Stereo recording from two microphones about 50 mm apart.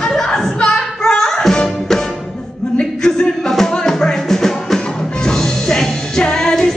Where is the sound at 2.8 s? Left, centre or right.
Centre.